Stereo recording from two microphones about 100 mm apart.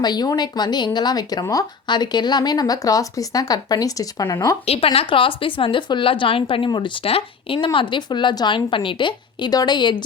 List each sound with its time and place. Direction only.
0.0 s speech: 45° left (ahead or behind)
4.6 s speech: 90° left
4.9 s a woman's voice: 60° left (ahead or behind)